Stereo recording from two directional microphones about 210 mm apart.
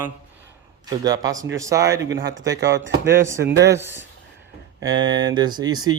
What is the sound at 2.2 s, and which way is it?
Speech, 55° right (ahead or behind).